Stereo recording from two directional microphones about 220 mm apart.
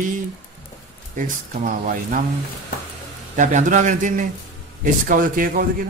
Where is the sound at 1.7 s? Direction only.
40° right (ahead or behind).